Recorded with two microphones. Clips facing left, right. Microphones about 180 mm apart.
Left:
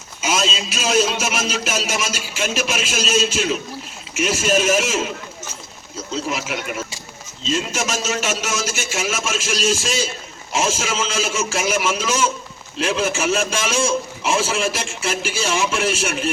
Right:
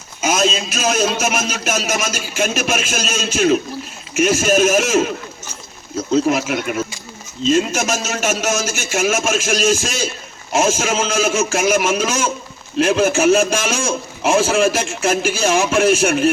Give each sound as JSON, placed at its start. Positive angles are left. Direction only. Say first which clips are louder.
{"t": 0.2, "sound": "a man's voice", "louder": "right 4 dB", "side_deg": -50}